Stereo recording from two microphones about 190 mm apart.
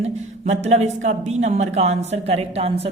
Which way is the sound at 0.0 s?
35° right (ahead or behind).